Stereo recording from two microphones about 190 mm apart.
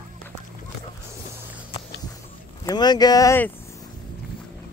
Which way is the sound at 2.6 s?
20° left (ahead or behind).